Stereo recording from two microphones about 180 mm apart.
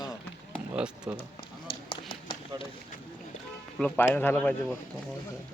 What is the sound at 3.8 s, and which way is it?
Speech, 5° left (ahead or behind).